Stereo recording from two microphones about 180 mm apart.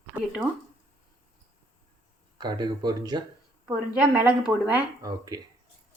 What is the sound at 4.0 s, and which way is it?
A woman's voice, 5° right (ahead or behind).